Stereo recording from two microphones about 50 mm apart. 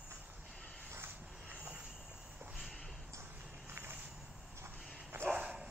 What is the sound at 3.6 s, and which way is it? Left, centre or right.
Walk, right.